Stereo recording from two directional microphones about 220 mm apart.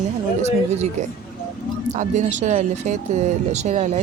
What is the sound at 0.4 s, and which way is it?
Speech, 30° right (ahead or behind).